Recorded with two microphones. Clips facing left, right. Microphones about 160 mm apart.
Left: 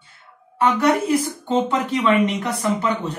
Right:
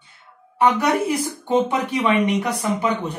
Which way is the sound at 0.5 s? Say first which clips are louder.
Even; 15° right (ahead or behind).